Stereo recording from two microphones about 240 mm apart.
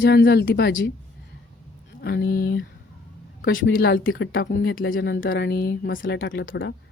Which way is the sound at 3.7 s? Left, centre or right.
Left.